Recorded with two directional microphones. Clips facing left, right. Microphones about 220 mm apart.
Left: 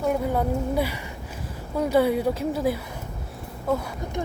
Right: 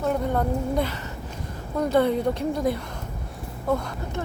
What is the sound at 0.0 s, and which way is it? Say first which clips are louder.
A woman's voice: even; 10° left (ahead or behind).